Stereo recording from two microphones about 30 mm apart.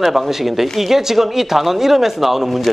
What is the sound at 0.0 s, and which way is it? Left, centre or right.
A man's voice, centre.